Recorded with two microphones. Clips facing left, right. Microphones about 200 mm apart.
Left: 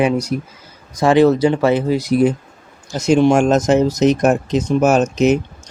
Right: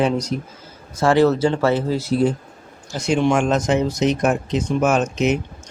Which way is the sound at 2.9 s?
40° left (ahead or behind).